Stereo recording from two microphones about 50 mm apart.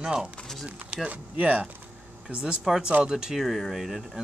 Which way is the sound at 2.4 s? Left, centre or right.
Centre.